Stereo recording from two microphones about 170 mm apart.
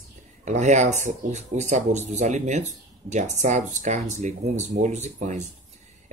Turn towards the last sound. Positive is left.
turn(degrees=-40)  # may be behind; listen again after turning